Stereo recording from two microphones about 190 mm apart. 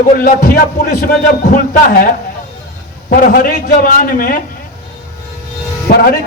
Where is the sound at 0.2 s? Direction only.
50° left (ahead or behind).